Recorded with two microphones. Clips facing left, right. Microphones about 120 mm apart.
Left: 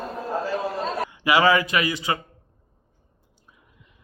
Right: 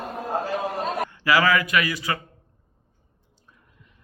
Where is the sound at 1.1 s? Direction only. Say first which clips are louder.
Left 2 dB; 20° left (ahead or behind).